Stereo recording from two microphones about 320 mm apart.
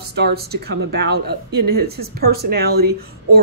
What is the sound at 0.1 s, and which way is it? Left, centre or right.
Speech, right.